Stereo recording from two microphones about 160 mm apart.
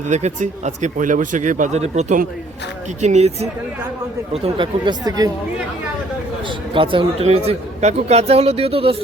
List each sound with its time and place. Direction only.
0.1 s speech: 45° right (ahead or behind)
4.4 s speech: 30° right (ahead or behind)
6.7 s speech: 30° right (ahead or behind)